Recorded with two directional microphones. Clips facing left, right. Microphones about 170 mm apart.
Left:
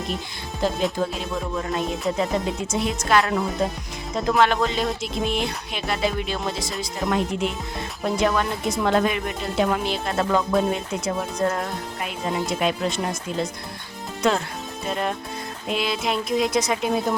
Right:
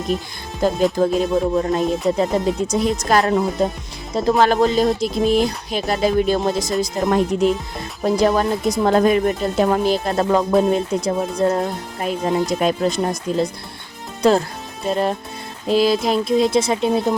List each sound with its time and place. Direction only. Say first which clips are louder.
0.6 s music: right 5 dB; 45° right (ahead or behind)
0.9 s a woman's voice: right 9 dB; 45° right (ahead or behind)